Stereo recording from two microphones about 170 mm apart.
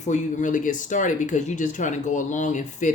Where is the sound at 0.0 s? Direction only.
45° left (ahead or behind).